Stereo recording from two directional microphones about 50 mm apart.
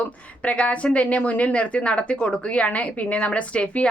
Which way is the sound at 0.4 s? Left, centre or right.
Left.